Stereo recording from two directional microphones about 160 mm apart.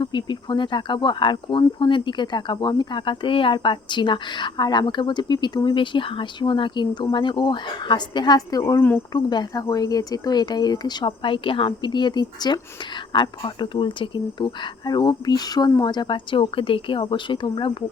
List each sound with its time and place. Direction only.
0.0 s speech: 30° left (ahead or behind)